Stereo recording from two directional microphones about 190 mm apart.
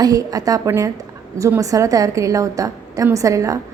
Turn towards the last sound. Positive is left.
turn(degrees=-15)  # may be behind; listen again after turning